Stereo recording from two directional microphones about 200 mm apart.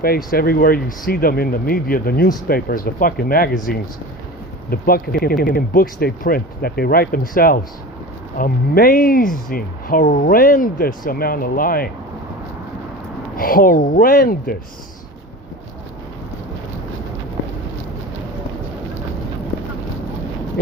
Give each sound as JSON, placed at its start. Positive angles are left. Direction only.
{"t": 0.0, "sound": "speech", "side_deg": 45}
{"t": 13.3, "sound": "speech", "side_deg": 45}